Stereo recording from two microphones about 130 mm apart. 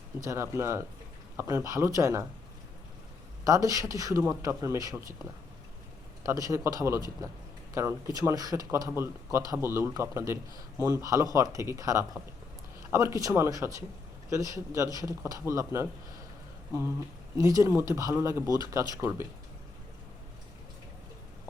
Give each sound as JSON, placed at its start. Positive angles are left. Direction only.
{"t": 0.2, "sound": "speech", "side_deg": -20}
{"t": 3.4, "sound": "speech", "side_deg": -25}
{"t": 6.2, "sound": "speech", "side_deg": -25}
{"t": 17.3, "sound": "speech", "side_deg": -25}